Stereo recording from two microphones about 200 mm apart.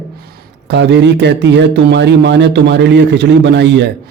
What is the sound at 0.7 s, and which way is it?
Speech, 60° right (ahead or behind).